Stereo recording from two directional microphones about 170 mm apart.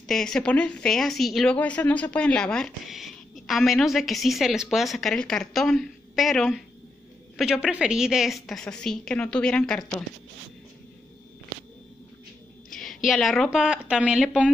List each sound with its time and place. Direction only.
0.0 s a woman's voice: 5° left (ahead or behind)
12.6 s a woman's voice: centre (ahead or behind)